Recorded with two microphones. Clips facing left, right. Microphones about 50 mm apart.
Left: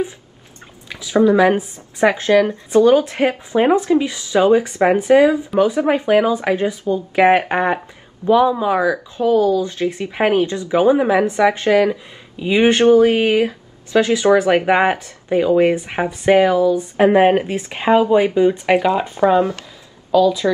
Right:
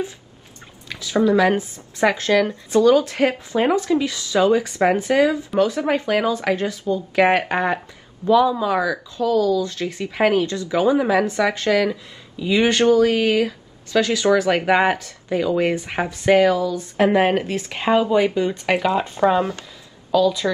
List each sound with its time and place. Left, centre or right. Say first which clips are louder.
0.8 s speech: left 4 dB; centre